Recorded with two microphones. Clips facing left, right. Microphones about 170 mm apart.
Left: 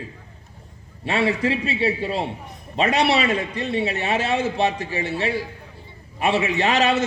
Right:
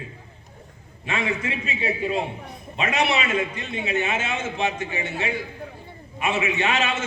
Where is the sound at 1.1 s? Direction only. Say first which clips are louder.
Left 6 dB; 35° left (ahead or behind).